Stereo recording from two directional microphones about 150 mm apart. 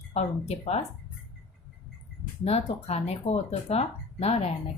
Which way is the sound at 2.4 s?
45° left (ahead or behind).